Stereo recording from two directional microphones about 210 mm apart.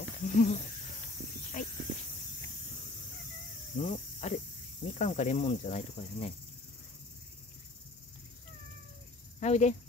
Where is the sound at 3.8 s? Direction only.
30° left (ahead or behind).